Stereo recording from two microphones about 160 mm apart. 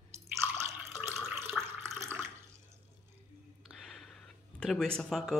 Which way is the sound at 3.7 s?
Centre (ahead or behind).